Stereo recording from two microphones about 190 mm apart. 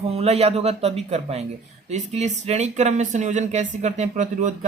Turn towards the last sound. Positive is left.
turn(degrees=-40)  # may be behind; listen again after turning